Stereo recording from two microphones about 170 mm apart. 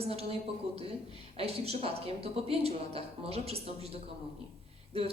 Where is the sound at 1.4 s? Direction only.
35° right (ahead or behind).